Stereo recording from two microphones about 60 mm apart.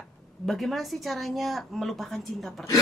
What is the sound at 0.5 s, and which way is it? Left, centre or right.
Speech, centre.